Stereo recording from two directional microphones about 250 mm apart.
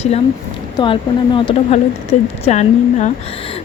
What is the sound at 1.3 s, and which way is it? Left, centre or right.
Speech, centre.